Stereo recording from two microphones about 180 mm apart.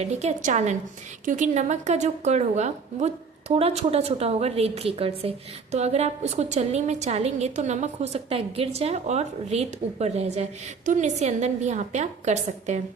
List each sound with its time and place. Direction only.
0.0 s a woman's voice: 40° right (ahead or behind)